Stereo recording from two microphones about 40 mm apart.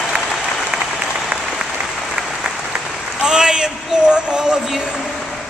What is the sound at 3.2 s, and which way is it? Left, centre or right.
A man's voice, centre.